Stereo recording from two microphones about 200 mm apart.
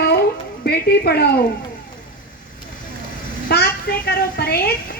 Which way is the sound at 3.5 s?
50° left (ahead or behind).